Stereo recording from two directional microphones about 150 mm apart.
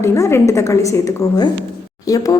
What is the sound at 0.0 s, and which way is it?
Speech, 15° left (ahead or behind).